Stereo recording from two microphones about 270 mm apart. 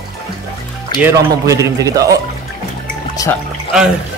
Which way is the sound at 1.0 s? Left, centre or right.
Centre.